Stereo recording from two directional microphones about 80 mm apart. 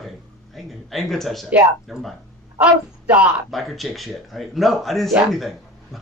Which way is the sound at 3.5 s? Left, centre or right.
Centre.